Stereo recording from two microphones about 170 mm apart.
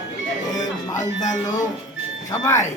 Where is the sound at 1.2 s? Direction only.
45° left (ahead or behind).